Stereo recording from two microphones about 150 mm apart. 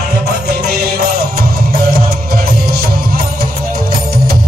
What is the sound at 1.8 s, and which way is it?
Music, 85° right.